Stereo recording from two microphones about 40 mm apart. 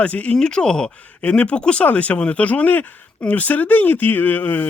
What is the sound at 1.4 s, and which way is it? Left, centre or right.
Speech, left.